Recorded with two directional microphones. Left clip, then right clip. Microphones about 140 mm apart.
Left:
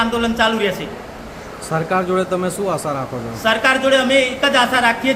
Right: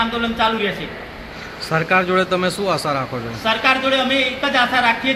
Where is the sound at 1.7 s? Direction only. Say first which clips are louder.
Right 2 dB; centre (ahead or behind).